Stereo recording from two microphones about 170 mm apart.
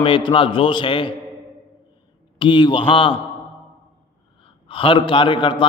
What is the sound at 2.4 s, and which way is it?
Speech, 30° left (ahead or behind).